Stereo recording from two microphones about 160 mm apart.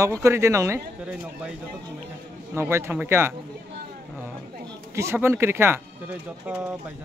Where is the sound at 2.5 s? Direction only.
15° right (ahead or behind).